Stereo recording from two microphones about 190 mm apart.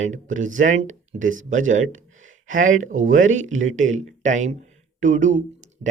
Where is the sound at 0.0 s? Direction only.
40° right (ahead or behind).